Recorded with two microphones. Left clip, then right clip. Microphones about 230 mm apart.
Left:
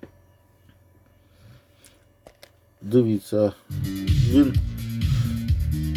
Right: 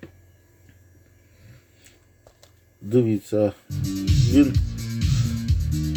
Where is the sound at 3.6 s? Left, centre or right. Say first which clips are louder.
Right 2 dB; left.